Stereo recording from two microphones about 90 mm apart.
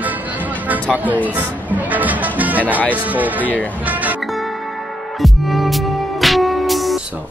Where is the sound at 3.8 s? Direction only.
20° right (ahead or behind).